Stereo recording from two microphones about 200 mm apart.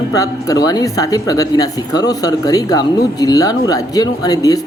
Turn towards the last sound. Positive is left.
turn(degrees=20)  # may be behind; listen again after turning